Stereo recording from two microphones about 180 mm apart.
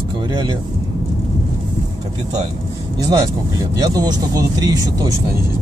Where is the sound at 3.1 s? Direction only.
20° right (ahead or behind).